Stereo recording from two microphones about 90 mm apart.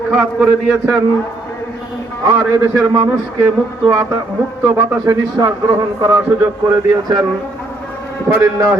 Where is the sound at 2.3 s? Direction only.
30° right (ahead or behind).